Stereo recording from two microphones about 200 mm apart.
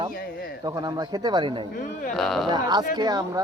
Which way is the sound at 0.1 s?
45° left (ahead or behind).